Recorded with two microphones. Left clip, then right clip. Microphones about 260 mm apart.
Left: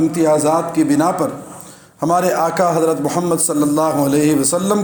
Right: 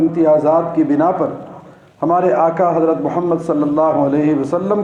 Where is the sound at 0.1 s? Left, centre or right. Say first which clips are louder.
Right 2 dB; left.